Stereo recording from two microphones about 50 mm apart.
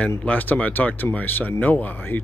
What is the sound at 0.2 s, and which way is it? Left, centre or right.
A man's voice, left.